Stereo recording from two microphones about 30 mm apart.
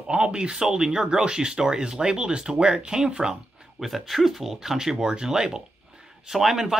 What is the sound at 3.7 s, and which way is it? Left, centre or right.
Speech, centre.